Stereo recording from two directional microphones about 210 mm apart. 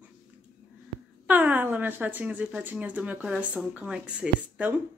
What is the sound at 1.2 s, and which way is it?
Speech, 10° right (ahead or behind).